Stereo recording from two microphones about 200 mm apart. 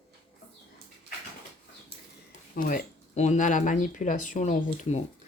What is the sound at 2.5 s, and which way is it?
Speech, 45° left (ahead or behind).